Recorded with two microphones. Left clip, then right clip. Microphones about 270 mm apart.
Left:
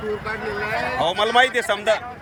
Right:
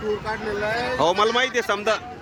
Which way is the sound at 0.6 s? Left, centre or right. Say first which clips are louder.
Right 1 dB; centre.